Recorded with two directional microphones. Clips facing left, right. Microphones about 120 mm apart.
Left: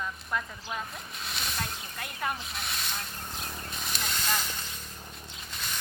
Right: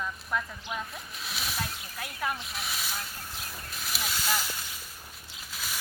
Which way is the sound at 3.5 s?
5° right (ahead or behind).